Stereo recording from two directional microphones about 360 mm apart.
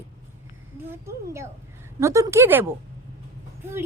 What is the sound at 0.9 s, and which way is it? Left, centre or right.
A woman's voice, centre.